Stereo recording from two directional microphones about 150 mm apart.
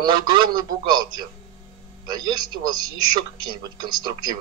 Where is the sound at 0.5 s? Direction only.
30° right (ahead or behind).